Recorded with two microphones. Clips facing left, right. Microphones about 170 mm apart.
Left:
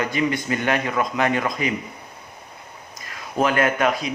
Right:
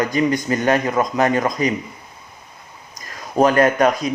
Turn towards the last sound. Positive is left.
turn(degrees=-40)  # may be behind; listen again after turning